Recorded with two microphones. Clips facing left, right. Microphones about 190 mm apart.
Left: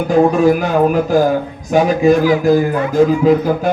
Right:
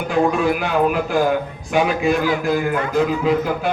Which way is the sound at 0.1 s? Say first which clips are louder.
Left 7 dB; 40° left (ahead or behind).